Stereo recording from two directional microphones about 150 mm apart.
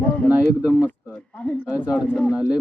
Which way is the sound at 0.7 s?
5° right (ahead or behind).